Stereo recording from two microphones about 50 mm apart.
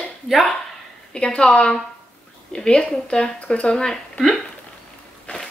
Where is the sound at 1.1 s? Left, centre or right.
Centre.